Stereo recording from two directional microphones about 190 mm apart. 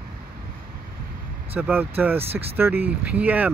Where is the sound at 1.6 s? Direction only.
10° right (ahead or behind).